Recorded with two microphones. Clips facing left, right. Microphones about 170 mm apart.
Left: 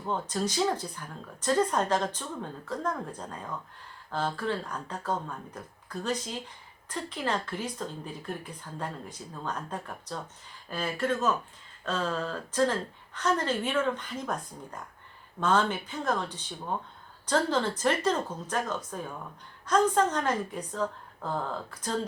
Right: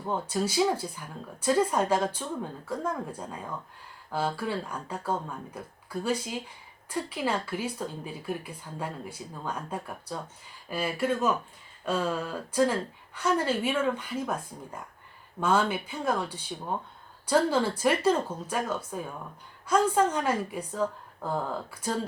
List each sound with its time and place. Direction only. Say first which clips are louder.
0.0 s speech: right 1 dB; 10° right (ahead or behind)